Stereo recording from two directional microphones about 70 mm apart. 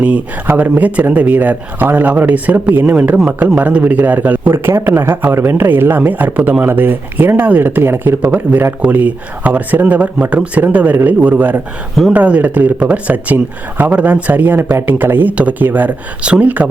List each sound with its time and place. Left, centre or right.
0.0 s speech: right
4.5 s a man's voice: right